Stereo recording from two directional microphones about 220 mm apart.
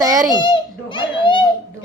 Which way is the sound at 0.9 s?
20° left (ahead or behind).